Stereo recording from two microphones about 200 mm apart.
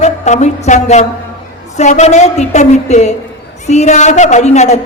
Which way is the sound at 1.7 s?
35° left (ahead or behind).